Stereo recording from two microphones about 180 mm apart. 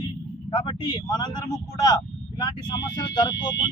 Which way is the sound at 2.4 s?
25° left (ahead or behind).